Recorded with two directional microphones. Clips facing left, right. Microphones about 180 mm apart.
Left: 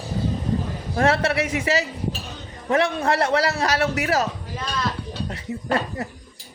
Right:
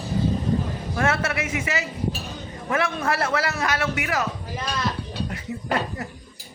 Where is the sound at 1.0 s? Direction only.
35° left (ahead or behind).